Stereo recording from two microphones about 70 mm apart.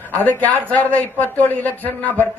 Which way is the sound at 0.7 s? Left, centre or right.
Left.